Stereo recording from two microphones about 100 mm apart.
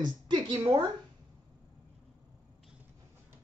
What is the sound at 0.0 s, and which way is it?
Speech, 45° right (ahead or behind).